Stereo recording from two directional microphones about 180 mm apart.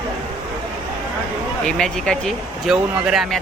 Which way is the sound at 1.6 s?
5° left (ahead or behind).